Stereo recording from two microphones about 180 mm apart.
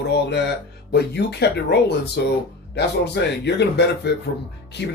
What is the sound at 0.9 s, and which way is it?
A man's voice, 65° left (ahead or behind).